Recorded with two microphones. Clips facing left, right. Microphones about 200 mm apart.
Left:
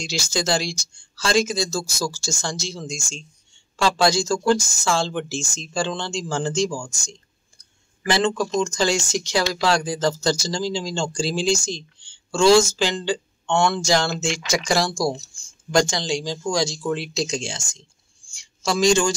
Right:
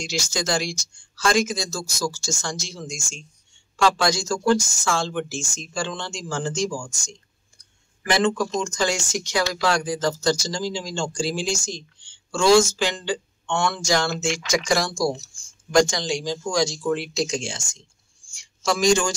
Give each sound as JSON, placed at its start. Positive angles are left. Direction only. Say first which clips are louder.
{"t": 0.0, "sound": "speech", "louder": "left 2 dB", "side_deg": 30}